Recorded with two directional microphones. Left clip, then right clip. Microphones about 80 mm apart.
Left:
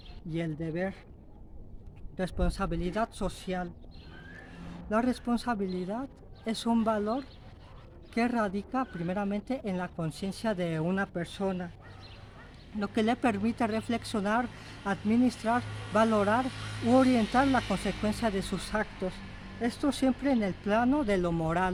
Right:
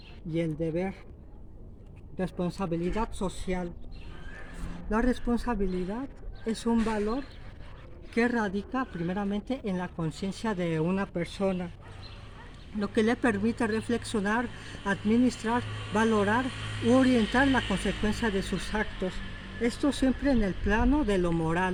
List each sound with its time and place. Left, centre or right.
0.3 s speech: left
2.1 s speech: left
4.9 s speech: left
8.3 s speech: left
11.4 s speech: centre
12.8 s speech: centre
18.7 s speech: centre
19.9 s speech: centre
20.7 s speech: left